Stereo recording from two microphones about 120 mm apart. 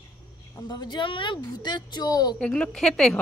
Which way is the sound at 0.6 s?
35° left (ahead or behind).